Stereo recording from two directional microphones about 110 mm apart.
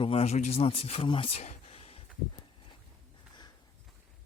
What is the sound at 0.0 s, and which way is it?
Speech, 65° left (ahead or behind).